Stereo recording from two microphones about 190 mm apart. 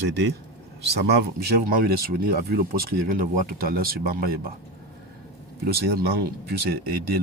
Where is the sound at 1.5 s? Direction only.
50° right (ahead or behind).